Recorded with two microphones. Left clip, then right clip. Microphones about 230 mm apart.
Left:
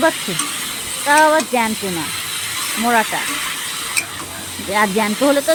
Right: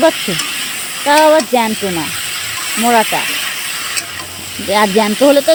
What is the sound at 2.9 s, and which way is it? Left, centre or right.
Speech, right.